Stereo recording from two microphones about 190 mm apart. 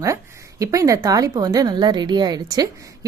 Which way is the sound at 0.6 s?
15° right (ahead or behind).